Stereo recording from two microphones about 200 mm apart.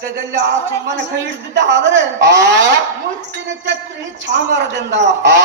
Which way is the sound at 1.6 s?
60° right (ahead or behind).